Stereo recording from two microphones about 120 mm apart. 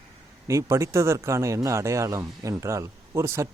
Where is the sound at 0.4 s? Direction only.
25° right (ahead or behind).